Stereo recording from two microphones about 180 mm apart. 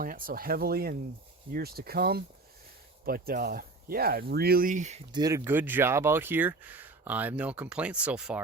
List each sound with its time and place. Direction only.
0.0 s speech: 50° right (ahead or behind)
5.1 s speech: 20° right (ahead or behind)